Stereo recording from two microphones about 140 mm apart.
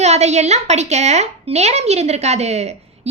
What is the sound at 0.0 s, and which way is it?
A woman's voice, 50° right (ahead or behind).